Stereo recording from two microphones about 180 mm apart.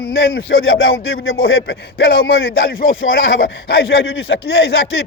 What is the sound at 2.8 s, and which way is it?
Speech, 90° left.